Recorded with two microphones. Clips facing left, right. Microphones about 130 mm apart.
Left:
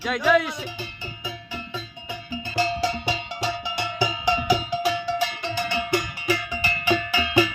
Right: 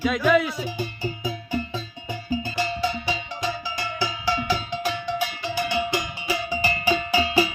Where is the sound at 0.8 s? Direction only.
45° right (ahead or behind).